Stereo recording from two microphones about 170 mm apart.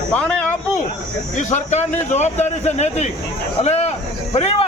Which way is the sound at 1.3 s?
45° left (ahead or behind).